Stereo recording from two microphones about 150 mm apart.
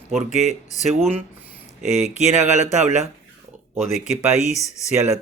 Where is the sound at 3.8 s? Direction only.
50° left (ahead or behind).